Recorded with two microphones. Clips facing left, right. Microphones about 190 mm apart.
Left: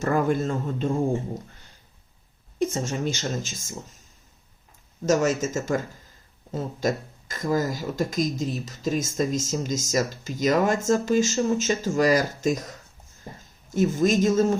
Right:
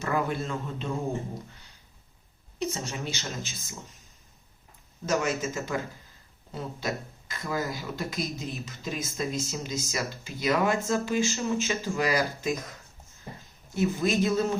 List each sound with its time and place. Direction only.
0.0 s speech: 45° left (ahead or behind)
2.6 s speech: 50° left (ahead or behind)
5.0 s speech: 45° left (ahead or behind)